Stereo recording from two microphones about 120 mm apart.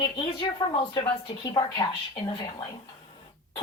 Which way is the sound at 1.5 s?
40° left (ahead or behind).